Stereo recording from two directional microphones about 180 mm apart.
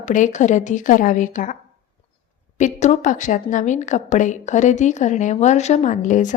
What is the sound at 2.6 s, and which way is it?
A woman's voice, 40° left (ahead or behind).